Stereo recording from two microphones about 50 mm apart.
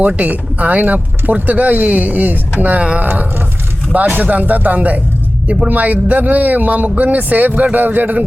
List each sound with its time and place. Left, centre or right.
0.0 s speech: right
3.0 s a sound: right
4.1 s speech: right